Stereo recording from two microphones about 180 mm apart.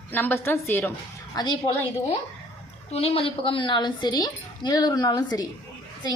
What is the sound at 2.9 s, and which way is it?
A woman's voice, 35° left (ahead or behind).